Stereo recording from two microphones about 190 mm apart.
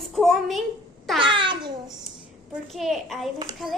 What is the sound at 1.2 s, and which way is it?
Babbling, 25° right (ahead or behind).